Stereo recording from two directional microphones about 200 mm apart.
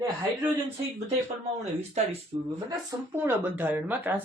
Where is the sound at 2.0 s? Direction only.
35° right (ahead or behind).